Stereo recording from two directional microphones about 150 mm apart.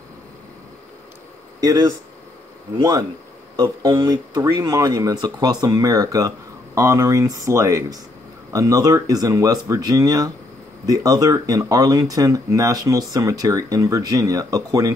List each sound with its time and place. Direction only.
1.6 s speech: 25° right (ahead or behind)
3.5 s speech: 25° right (ahead or behind)